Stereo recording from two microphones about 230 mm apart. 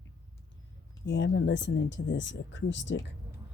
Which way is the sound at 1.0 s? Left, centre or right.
Left.